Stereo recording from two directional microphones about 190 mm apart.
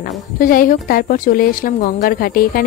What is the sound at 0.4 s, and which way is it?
Speech, 45° left (ahead or behind).